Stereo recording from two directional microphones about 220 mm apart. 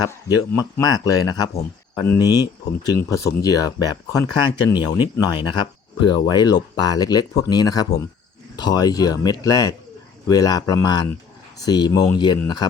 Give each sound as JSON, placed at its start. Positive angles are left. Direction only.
{"t": 0.0, "sound": "speech", "side_deg": 20}